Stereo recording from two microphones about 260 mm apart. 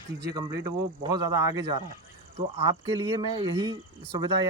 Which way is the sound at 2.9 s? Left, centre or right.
Centre.